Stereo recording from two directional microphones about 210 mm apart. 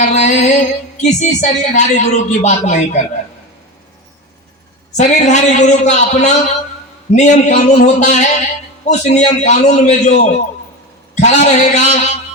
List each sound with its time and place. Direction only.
0.0 s music: 35° left (ahead or behind)
1.0 s a man's voice: 35° left (ahead or behind)
4.9 s a man's voice: 35° left (ahead or behind)